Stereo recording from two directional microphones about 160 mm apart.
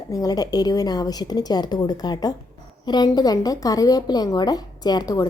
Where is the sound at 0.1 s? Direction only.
20° left (ahead or behind).